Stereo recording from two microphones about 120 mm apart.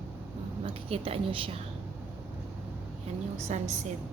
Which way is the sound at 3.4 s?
70° right (ahead or behind).